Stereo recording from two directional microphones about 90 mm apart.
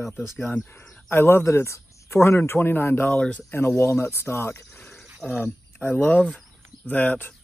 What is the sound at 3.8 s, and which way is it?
A man's voice, 30° left (ahead or behind).